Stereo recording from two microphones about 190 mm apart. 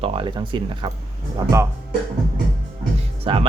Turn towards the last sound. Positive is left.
turn(degrees=-30)  # may be behind; listen again after turning